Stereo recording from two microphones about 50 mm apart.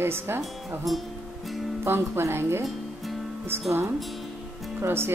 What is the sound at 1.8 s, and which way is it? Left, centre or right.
Speech, right.